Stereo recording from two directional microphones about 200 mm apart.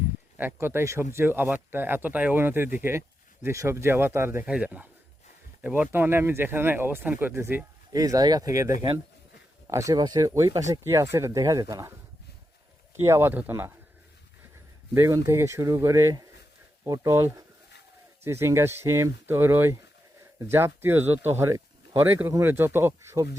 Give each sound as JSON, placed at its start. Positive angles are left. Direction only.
{"t": 0.3, "sound": "speech", "side_deg": -10}
{"t": 13.0, "sound": "speech", "side_deg": -10}
{"t": 14.9, "sound": "speech", "side_deg": -15}